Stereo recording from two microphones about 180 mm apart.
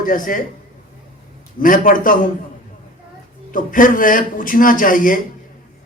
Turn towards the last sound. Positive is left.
turn(degrees=50)  # may be behind; listen again after turning